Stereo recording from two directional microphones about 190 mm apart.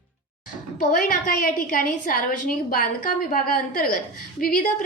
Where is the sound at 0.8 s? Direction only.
45° left (ahead or behind).